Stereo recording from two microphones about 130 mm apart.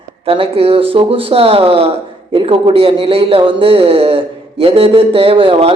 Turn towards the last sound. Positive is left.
turn(degrees=-45)  # may be behind; listen again after turning